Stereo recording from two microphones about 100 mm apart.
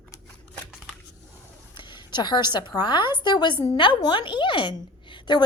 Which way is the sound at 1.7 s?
50° left (ahead or behind).